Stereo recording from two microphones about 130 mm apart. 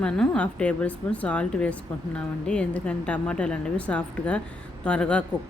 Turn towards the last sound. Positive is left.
turn(degrees=10)  # may be behind; listen again after turning